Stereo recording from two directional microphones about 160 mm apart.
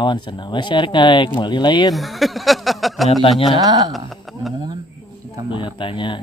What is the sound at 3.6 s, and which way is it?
Speech, 20° right (ahead or behind).